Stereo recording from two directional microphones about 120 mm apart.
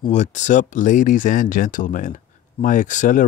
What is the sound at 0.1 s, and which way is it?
Speech, 80° left.